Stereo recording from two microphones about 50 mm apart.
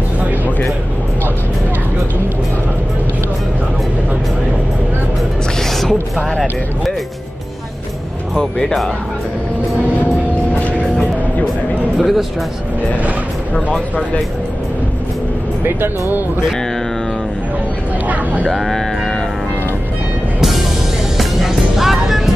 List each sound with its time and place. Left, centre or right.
5.6 s music: centre
8.4 s speech: centre
12.0 s speech: centre
13.7 s speech: left
15.6 s speech: right
18.0 s vehicle: right
18.5 s music: centre
20.3 s music: centre